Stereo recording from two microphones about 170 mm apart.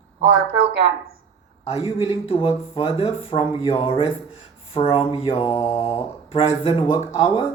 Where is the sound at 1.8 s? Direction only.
30° left (ahead or behind).